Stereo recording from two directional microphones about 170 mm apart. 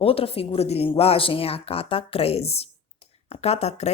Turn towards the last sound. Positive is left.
turn(degrees=40)  # may be behind; listen again after turning